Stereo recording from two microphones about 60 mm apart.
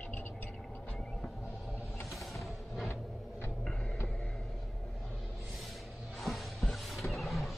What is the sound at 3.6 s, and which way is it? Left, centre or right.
Music, centre.